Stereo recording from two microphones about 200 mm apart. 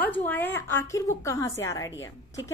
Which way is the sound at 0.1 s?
10° left (ahead or behind).